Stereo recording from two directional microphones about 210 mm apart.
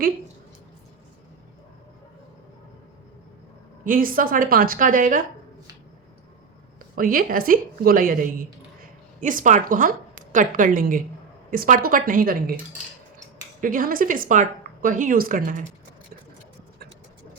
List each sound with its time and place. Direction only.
3.8 s a woman's voice: 40° right (ahead or behind)
6.9 s a woman's voice: 45° right (ahead or behind)